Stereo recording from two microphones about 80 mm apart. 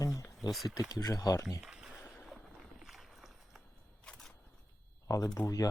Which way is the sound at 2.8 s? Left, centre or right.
Centre.